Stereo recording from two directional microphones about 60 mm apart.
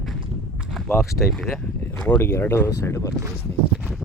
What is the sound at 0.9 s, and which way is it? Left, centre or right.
Speech, left.